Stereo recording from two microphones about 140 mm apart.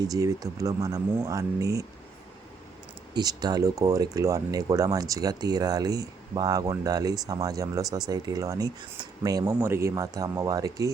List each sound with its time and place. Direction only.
0.0 s speech: 25° right (ahead or behind)
3.2 s speech: 30° right (ahead or behind)